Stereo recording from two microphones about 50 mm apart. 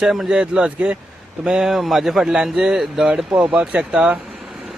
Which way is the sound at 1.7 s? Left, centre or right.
Centre.